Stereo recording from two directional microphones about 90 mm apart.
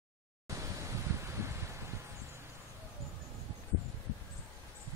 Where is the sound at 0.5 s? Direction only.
35° right (ahead or behind).